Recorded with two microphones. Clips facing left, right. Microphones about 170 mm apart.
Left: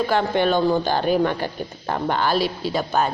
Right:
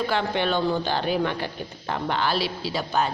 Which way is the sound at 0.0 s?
45° left (ahead or behind).